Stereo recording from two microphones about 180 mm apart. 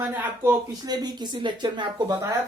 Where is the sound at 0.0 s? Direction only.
15° right (ahead or behind).